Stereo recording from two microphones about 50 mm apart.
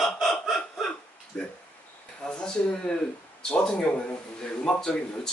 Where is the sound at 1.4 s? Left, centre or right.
Centre.